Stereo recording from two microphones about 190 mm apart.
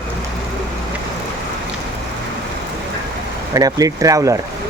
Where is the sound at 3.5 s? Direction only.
20° right (ahead or behind).